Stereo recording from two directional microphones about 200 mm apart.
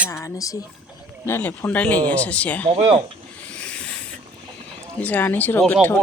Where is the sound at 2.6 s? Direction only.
30° right (ahead or behind).